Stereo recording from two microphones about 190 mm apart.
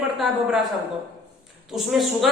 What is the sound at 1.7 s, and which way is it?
Speech, centre (ahead or behind).